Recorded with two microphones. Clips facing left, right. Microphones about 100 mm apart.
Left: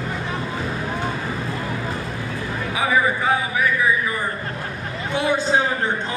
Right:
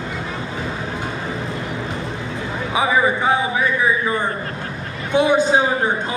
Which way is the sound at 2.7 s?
20° right (ahead or behind).